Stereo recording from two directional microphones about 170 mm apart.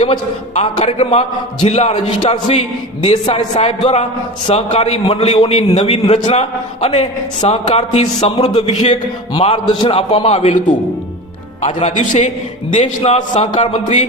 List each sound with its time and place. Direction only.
0.0 s a man's voice: 35° left (ahead or behind)
11.6 s a man's voice: 40° left (ahead or behind)